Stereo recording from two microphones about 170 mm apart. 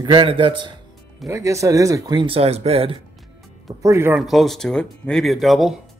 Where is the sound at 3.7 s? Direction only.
15° right (ahead or behind).